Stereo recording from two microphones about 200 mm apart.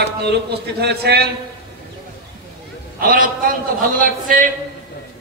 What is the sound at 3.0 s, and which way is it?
A man's voice, 45° right (ahead or behind).